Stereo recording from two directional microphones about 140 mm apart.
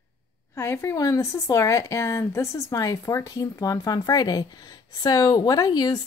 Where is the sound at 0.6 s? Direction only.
20° left (ahead or behind).